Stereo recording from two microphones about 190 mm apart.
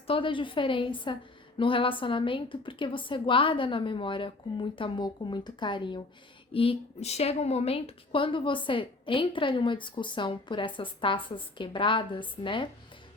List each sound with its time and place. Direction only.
0.1 s a woman's voice: 25° left (ahead or behind)